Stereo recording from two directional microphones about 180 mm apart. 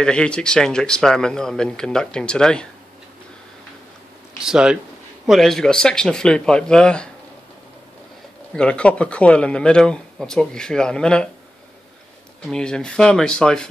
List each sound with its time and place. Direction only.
0.0 s speech: 5° left (ahead or behind)
4.4 s speech: 5° right (ahead or behind)
8.5 s speech: 5° left (ahead or behind)
12.4 s speech: 5° left (ahead or behind)